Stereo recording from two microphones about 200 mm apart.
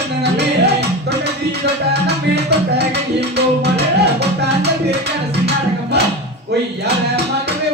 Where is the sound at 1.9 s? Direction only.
55° right (ahead or behind).